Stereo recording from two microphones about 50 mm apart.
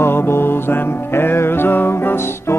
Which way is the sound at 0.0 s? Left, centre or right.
Left.